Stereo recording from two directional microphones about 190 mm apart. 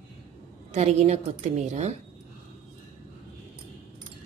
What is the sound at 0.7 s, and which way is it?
A woman's voice, 35° right (ahead or behind).